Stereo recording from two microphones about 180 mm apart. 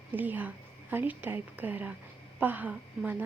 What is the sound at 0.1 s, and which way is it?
A woman's voice, 10° right (ahead or behind).